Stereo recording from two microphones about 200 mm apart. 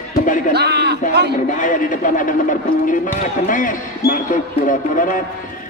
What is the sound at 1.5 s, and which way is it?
A man's voice, 40° left (ahead or behind).